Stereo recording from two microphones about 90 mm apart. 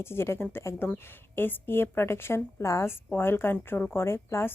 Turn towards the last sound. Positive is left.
turn(degrees=30)  # may be behind; listen again after turning